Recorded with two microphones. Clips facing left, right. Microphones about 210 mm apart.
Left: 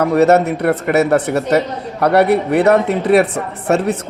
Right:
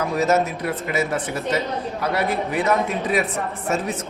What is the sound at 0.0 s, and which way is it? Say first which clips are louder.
A man's voice: left 8 dB; 65° left (ahead or behind).